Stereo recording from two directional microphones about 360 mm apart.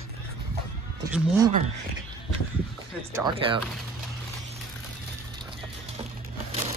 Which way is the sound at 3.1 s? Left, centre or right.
Centre.